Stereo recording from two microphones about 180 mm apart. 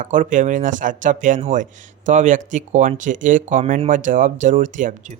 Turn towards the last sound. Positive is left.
turn(degrees=-45)  # may be behind; listen again after turning